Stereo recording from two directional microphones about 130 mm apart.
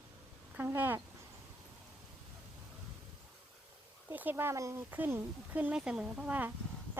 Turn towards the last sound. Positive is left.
turn(degrees=-10)  # may be behind; listen again after turning